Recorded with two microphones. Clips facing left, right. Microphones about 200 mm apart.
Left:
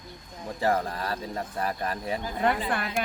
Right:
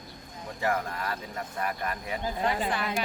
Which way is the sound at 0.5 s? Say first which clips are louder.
Left 3 dB; 35° left (ahead or behind).